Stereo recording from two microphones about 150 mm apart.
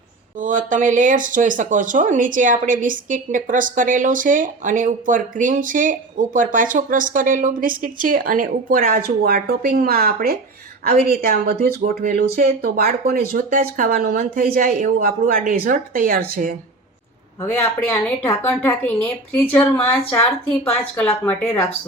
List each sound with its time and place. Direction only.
0.3 s a woman's voice: 60° right (ahead or behind); by 11.7 s 90° right
11.8 s speech: 65° right (ahead or behind)
12.4 s a woman's voice: 75° right (ahead or behind)
12.8 s a woman's voice: 65° right (ahead or behind)
17.4 s a woman's voice: 15° left (ahead or behind)